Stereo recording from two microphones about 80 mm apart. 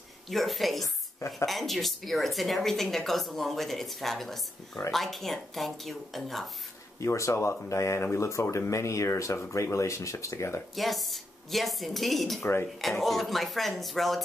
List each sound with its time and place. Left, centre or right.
0.3 s a woman's voice: centre
7.0 s speech: left
10.8 s a woman's voice: centre